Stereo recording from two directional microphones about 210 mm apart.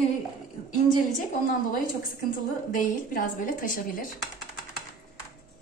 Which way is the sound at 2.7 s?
40° left (ahead or behind).